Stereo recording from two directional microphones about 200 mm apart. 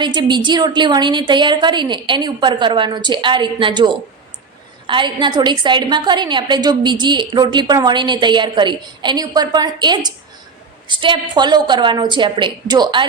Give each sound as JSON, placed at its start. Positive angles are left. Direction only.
{"t": 0.0, "sound": "a woman's voice", "side_deg": -20}